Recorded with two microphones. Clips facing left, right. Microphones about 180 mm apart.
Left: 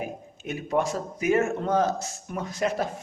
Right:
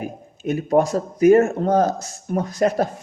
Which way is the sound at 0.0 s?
40° right (ahead or behind).